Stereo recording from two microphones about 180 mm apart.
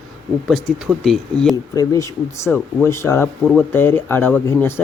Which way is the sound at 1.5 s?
15° left (ahead or behind).